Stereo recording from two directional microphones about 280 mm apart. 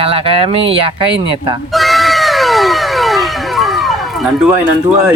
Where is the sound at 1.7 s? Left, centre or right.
Centre.